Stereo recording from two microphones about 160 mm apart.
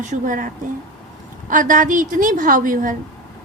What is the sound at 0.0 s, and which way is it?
A woman's voice, 50° right (ahead or behind).